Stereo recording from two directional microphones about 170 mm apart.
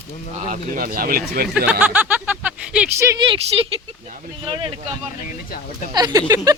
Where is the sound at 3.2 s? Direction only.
30° right (ahead or behind).